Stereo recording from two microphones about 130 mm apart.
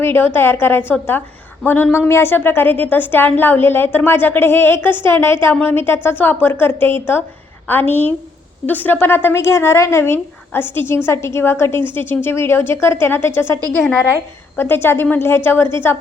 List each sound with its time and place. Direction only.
0.0 s a woman's voice: 20° left (ahead or behind)